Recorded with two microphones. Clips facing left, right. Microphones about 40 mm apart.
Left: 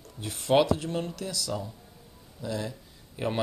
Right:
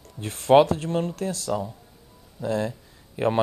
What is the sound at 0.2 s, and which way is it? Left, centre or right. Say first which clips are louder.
Speech: right 7 dB; right.